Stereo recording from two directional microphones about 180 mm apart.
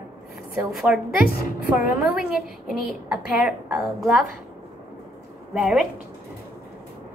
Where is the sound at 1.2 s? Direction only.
55° left (ahead or behind).